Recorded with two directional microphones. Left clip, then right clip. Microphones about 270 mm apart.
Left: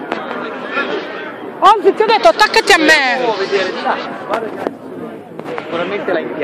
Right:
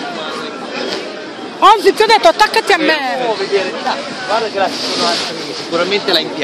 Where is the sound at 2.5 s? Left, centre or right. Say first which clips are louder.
Left 3 dB; centre.